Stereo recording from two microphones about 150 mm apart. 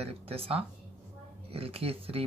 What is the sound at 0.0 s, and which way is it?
Speech, 40° right (ahead or behind).